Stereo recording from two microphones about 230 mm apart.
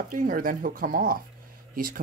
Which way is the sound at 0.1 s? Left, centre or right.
Right.